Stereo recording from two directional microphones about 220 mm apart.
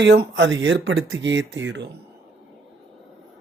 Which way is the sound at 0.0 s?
50° right (ahead or behind).